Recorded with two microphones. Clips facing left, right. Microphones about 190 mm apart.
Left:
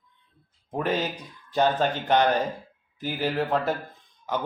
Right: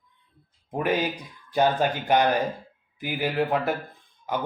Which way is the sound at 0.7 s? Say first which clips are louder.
Right 2 dB; 10° right (ahead or behind).